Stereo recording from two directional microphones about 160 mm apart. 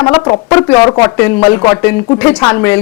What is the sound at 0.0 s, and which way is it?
Speech, 25° left (ahead or behind).